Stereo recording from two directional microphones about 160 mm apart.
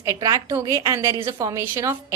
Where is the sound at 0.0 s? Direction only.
20° right (ahead or behind).